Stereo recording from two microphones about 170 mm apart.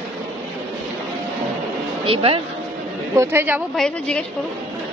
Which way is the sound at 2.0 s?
30° right (ahead or behind).